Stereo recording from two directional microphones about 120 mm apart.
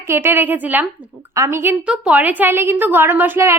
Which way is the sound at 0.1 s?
20° right (ahead or behind).